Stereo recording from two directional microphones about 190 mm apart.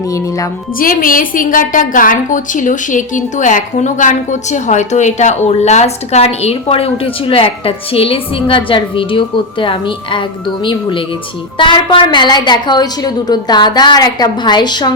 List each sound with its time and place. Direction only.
0.8 s a woman's voice: 45° left (ahead or behind); by 14.9 s 25° left (ahead or behind)